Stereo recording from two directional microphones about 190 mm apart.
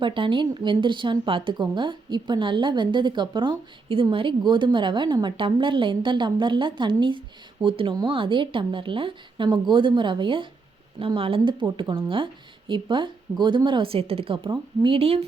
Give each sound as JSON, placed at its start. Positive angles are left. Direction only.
{"t": 0.0, "sound": "speech", "side_deg": -25}